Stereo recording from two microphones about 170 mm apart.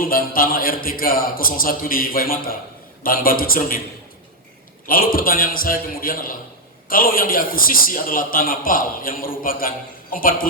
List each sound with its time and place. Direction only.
0.0 s a man's voice: 55° left (ahead or behind)
4.9 s a man's voice: 55° left (ahead or behind)